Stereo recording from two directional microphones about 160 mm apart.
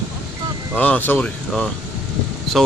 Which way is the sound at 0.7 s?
10° left (ahead or behind).